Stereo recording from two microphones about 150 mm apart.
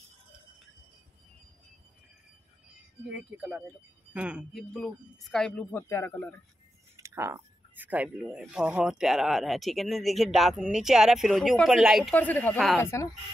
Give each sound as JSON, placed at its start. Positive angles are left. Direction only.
{"t": 3.1, "sound": "speech", "side_deg": -5}
{"t": 7.0, "sound": "speech", "side_deg": -20}
{"t": 12.1, "sound": "speech", "side_deg": 10}